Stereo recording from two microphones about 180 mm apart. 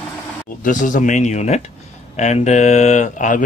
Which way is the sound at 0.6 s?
45° left (ahead or behind).